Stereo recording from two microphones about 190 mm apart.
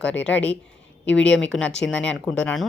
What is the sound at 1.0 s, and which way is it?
Speech, 75° left (ahead or behind).